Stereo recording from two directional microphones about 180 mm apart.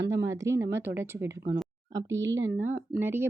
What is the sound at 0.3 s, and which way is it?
Speech, 15° right (ahead or behind).